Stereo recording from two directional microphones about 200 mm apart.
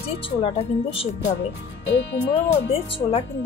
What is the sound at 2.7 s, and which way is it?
Speech, 30° left (ahead or behind).